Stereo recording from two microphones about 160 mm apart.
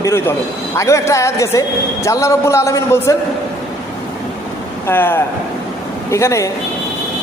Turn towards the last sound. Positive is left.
turn(degrees=20)  # may be behind; listen again after turning